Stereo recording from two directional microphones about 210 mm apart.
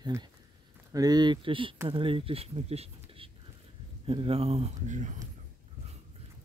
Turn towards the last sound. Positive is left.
turn(degrees=-35)  # may be behind; listen again after turning